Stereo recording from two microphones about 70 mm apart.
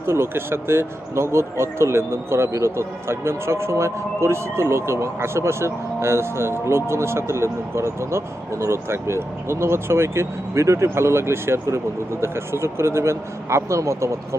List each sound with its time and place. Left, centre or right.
0.1 s speech: right